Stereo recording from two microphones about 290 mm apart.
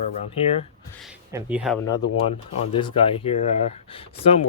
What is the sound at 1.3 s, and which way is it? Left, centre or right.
Speech, centre.